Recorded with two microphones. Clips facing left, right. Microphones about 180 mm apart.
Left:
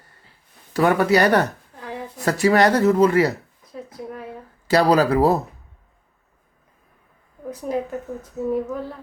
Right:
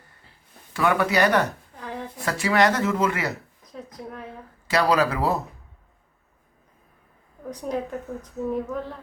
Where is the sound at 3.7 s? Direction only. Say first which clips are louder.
Left 4 dB; 5° left (ahead or behind).